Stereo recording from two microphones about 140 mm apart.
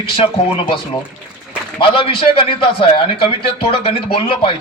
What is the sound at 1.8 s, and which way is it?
A man's voice, 40° left (ahead or behind).